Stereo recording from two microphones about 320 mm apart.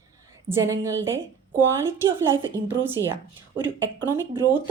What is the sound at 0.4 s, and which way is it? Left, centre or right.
A woman's voice, centre.